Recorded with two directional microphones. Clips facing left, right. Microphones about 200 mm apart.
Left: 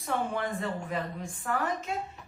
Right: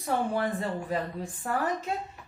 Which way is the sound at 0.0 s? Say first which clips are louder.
Right 3 dB; 35° right (ahead or behind).